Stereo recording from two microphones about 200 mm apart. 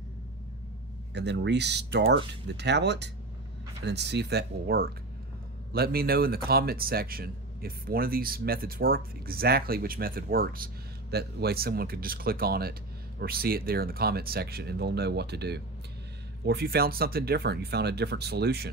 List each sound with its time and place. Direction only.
1.1 s speech: 60° right (ahead or behind)